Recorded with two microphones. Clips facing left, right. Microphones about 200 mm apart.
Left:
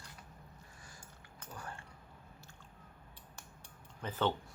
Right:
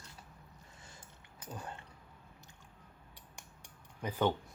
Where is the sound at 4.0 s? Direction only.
15° right (ahead or behind).